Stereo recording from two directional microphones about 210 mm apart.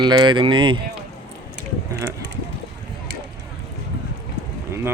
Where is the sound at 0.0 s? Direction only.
20° right (ahead or behind).